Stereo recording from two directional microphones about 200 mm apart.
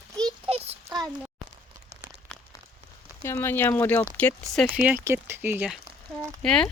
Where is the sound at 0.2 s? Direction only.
25° right (ahead or behind).